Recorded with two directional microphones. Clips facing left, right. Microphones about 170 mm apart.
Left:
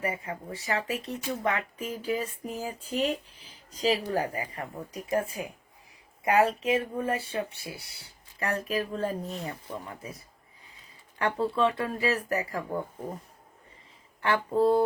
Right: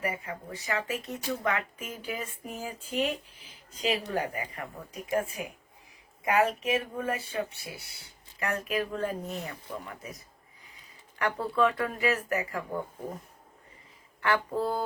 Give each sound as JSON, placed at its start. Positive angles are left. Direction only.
{"t": 0.0, "sound": "speech", "side_deg": 30}
{"t": 14.2, "sound": "speech", "side_deg": 30}